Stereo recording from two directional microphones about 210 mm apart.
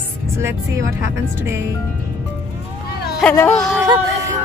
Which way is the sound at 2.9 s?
50° left (ahead or behind).